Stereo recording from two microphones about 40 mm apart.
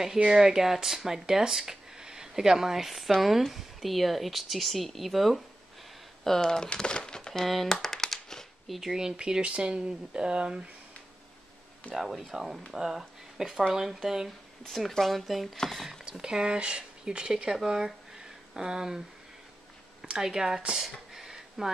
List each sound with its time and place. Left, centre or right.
0.3 s speech: centre
6.2 s speech: centre
7.4 s a sound: centre
8.6 s speech: centre
8.9 s speech: centre
11.9 s speech: centre
14.7 s speech: centre
16.1 s speech: centre
17.6 s a sound: centre
20.0 s speech: centre
20.7 s a sound: centre